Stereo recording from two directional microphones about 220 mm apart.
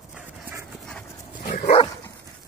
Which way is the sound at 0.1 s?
5° right (ahead or behind).